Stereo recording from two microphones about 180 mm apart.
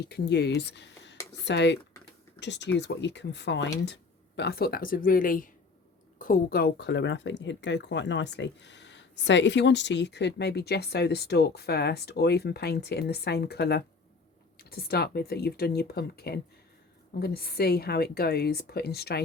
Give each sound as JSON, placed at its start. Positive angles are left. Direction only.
{"t": 0.1, "sound": "speech", "side_deg": 65}